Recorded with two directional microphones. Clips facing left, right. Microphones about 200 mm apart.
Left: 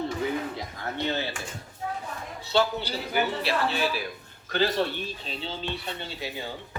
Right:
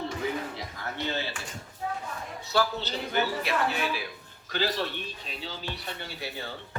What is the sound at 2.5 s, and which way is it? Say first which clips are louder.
Speech: left 3 dB; 20° left (ahead or behind).